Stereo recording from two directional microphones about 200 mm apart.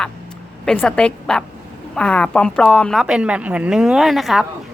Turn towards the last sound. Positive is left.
turn(degrees=0)  # may be behind; listen again after turning